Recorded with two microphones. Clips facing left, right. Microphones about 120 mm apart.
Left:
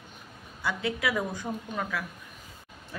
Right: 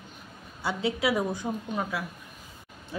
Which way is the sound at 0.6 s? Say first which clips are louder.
Right 3 dB; 25° right (ahead or behind).